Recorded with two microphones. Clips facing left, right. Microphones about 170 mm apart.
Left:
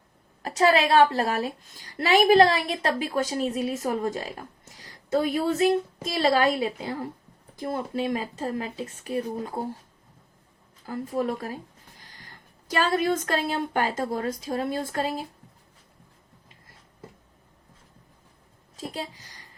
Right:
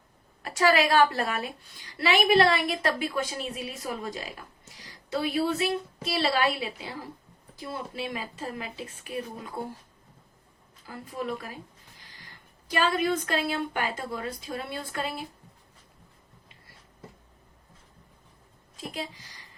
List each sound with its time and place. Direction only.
0.4 s a woman's voice: 35° left (ahead or behind)
10.8 s speech: 45° left (ahead or behind)
18.8 s a woman's voice: 40° left (ahead or behind)